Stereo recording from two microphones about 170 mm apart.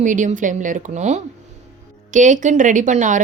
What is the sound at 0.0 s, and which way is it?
A woman's voice, 45° right (ahead or behind).